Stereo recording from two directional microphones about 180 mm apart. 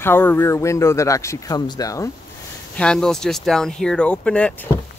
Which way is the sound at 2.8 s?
5° left (ahead or behind).